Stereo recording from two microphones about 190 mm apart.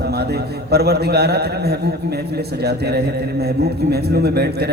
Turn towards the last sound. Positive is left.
turn(degrees=-55)  # may be behind; listen again after turning